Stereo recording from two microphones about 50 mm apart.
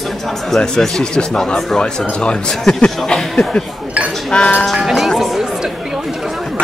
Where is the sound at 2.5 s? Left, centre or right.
Centre.